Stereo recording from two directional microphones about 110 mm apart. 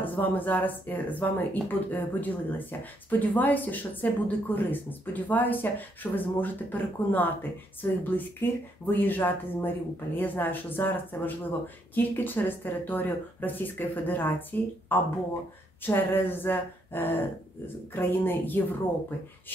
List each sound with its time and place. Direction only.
0.0 s a woman's voice: 15° left (ahead or behind)